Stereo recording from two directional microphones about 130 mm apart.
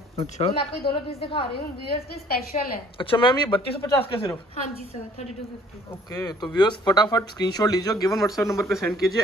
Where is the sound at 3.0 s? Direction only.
40° left (ahead or behind).